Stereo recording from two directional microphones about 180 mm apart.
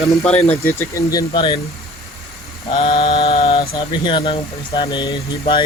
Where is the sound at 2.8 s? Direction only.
30° left (ahead or behind).